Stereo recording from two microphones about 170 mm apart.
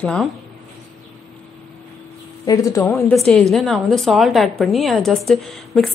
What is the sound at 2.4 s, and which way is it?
Speech, 20° left (ahead or behind).